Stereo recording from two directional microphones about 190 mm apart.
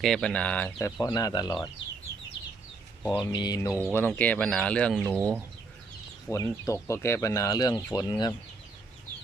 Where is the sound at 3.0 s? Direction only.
10° left (ahead or behind).